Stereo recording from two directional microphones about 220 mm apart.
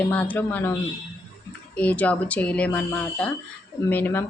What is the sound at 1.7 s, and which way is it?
Speech, 5° left (ahead or behind).